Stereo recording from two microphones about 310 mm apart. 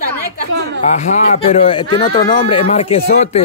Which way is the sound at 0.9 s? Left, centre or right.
Left.